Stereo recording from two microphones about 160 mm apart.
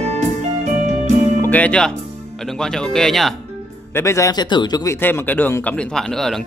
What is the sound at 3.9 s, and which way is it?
A man's voice, 20° left (ahead or behind).